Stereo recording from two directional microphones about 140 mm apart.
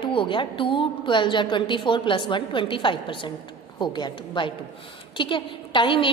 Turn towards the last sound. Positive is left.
turn(degrees=35)  # may be behind; listen again after turning